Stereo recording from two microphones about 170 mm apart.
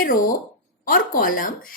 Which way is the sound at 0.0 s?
55° left (ahead or behind).